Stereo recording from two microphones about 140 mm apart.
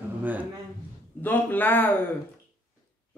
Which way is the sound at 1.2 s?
10° left (ahead or behind).